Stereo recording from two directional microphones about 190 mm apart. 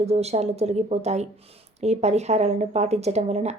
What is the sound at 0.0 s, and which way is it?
A woman's voice, 35° right (ahead or behind).